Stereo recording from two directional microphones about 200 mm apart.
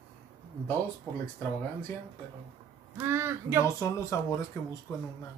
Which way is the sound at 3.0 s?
10° right (ahead or behind).